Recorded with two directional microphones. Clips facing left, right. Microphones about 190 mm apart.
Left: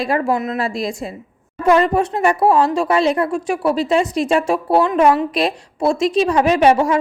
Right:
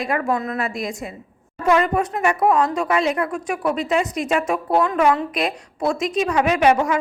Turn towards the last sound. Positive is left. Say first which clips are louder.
# left 3 dB
turn(degrees=30)  # may be behind; listen again after turning